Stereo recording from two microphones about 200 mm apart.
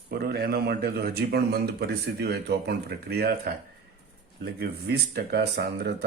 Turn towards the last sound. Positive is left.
turn(degrees=-55)  # may be behind; listen again after turning